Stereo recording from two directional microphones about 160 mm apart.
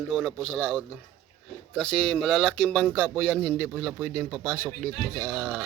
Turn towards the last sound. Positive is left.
turn(degrees=-15)  # may be behind; listen again after turning